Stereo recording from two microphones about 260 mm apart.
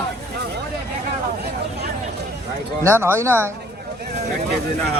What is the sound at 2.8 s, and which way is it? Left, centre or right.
Speech, centre.